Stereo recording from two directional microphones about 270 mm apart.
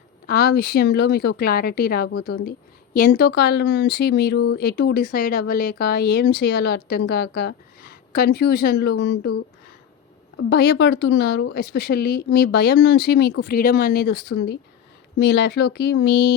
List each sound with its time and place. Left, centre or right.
0.3 s speech: left
10.3 s speech: left